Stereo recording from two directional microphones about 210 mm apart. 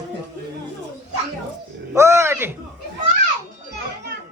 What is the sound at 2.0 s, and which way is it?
Speech, 15° right (ahead or behind).